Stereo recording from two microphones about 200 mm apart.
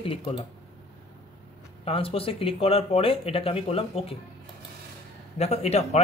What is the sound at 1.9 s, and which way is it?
Speech, 30° left (ahead or behind).